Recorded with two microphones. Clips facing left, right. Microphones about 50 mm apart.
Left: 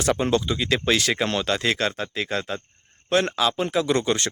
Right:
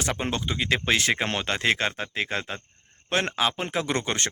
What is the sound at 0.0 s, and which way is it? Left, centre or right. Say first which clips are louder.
Speech: left 7 dB; right.